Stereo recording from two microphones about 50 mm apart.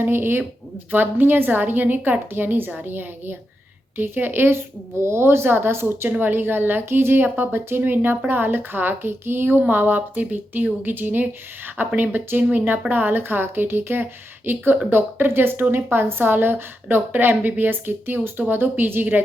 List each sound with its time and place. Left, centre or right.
0.0 s a woman's voice: right